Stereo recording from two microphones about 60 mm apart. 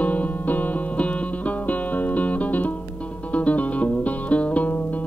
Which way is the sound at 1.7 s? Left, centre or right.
Left.